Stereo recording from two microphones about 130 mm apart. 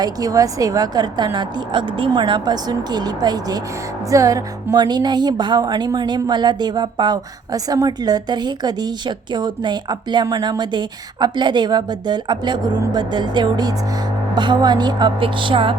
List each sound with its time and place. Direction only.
0.0 s speech: 30° right (ahead or behind)